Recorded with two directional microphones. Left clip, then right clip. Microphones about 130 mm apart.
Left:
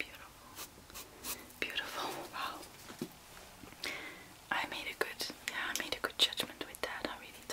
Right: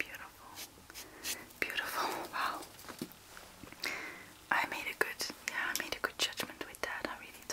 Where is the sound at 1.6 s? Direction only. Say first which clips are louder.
Right 3 dB; 30° right (ahead or behind).